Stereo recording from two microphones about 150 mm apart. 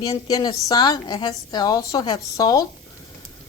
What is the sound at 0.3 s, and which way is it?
A woman's voice, 25° left (ahead or behind).